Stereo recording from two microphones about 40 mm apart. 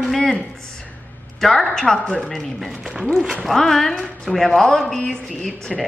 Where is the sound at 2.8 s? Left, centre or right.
Centre.